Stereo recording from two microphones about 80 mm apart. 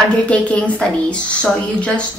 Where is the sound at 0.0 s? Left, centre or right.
Centre.